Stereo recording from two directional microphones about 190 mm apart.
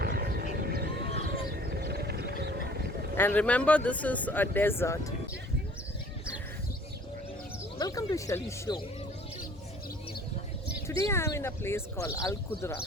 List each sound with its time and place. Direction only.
0.0 s a sound: 55° right (ahead or behind)
3.2 s speech: 10° left (ahead or behind)
7.8 s speech: 20° left (ahead or behind)
11.0 s speech: 15° left (ahead or behind)